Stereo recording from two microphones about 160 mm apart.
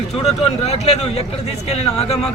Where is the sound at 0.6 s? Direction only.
40° left (ahead or behind).